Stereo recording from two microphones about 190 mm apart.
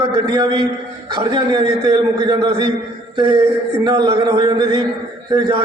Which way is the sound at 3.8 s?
20° right (ahead or behind).